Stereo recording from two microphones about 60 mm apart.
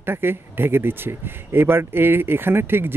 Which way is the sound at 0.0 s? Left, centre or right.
Right.